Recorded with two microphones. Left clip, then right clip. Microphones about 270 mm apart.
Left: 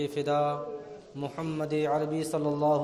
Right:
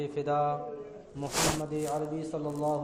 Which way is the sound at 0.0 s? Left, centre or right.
Left.